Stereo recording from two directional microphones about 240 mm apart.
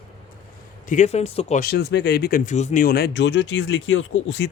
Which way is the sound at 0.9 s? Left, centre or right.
Left.